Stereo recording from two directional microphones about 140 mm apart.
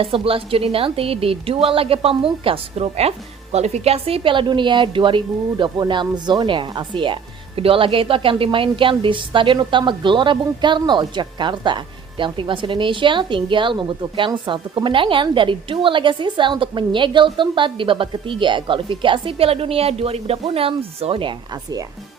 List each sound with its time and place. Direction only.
0.0 s a woman's voice: 40° right (ahead or behind)